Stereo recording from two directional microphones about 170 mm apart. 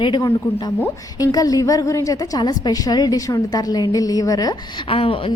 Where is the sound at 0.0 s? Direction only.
20° left (ahead or behind).